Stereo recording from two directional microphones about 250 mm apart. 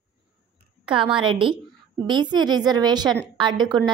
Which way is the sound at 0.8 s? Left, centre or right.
Centre.